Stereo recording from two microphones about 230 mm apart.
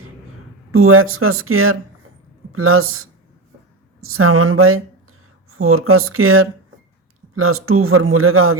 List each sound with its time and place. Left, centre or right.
0.7 s speech: right